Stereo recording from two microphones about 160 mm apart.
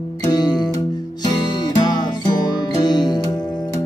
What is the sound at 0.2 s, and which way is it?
Music, 25° left (ahead or behind).